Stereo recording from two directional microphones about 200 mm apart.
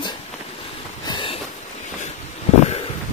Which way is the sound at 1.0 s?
25° left (ahead or behind).